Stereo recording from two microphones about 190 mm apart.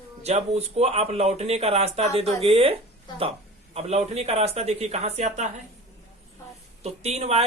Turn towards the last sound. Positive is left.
turn(degrees=-35)  # may be behind; listen again after turning